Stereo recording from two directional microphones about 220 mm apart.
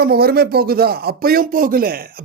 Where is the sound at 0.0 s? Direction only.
45° right (ahead or behind).